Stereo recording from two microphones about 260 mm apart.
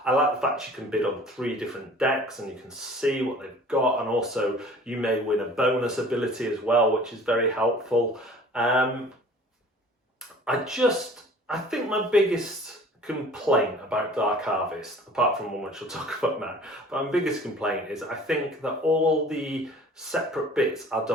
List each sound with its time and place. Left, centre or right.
0.0 s speech: centre
10.4 s speech: centre